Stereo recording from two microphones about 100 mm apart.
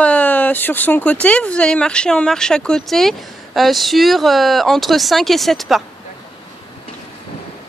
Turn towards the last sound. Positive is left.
turn(degrees=0)  # may be behind; listen again after turning